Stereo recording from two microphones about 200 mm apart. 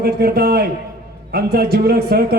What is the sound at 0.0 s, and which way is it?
A man's voice, 50° right (ahead or behind).